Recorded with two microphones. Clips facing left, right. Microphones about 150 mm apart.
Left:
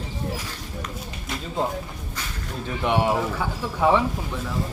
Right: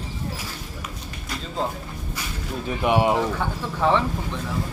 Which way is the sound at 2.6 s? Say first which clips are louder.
Right 2 dB; 10° right (ahead or behind).